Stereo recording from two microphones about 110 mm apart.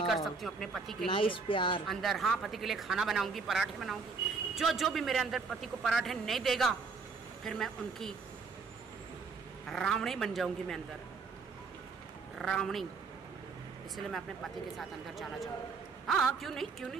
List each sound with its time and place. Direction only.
0.0 s speech: centre (ahead or behind)
1.1 s speech: 50° left (ahead or behind)
1.9 s speech: centre (ahead or behind)
9.7 s speech: 5° left (ahead or behind)
12.4 s speech: 5° left (ahead or behind)
13.9 s speech: centre (ahead or behind)